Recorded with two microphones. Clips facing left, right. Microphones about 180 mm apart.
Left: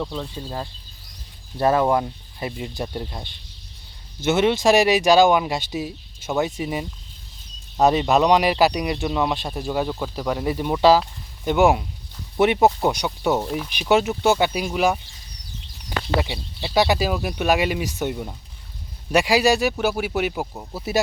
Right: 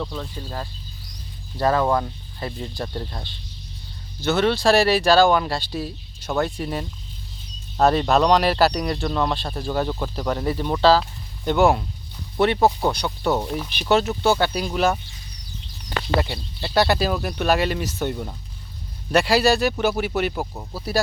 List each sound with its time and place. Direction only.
0.0 s speech: 10° left (ahead or behind)
13.1 s speech: 5° left (ahead or behind)
13.7 s speech: 10° left (ahead or behind)
20.7 s speech: 20° left (ahead or behind)